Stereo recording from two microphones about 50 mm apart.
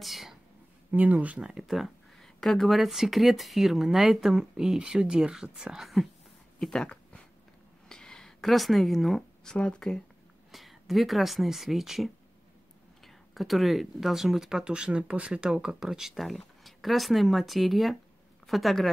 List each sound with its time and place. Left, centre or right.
0.0 s speech: centre
0.9 s speech: right
1.4 s speech: centre
1.7 s speech: centre
6.6 s speech: centre
7.9 s a sound: centre
9.4 s speech: centre
10.5 s speech: centre
15.8 s speech: centre